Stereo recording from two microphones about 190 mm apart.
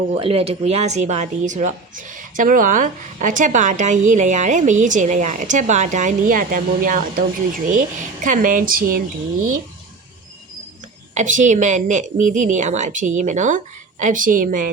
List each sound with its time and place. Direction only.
0.1 s a woman's voice: 30° right (ahead or behind); by 9.0 s 45° right (ahead or behind)
11.1 s a woman's voice: 40° right (ahead or behind)